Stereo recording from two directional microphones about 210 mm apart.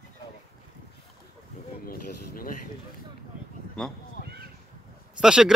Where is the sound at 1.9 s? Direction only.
40° left (ahead or behind).